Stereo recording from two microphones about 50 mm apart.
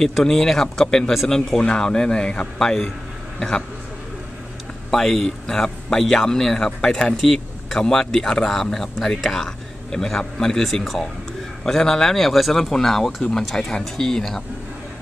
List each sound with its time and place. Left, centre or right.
0.0 s speech: centre
1.1 s speech: centre
1.6 s a man's voice: centre
4.9 s speech: centre